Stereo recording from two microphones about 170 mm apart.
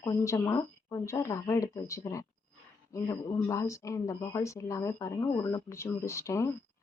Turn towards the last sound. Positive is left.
turn(degrees=15)  # may be behind; listen again after turning